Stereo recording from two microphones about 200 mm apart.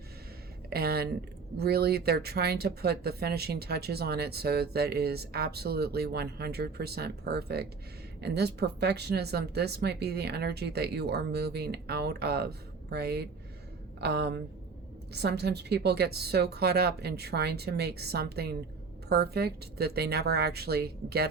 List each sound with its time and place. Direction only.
0.7 s a woman's voice: 50° right (ahead or behind)